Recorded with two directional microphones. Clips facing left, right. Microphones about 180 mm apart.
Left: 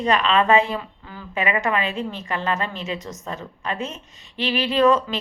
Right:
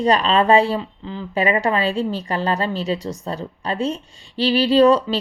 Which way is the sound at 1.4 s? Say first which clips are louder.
Right 4 dB; 35° right (ahead or behind).